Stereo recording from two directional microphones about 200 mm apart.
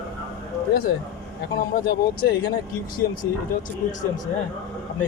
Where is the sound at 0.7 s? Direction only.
50° left (ahead or behind).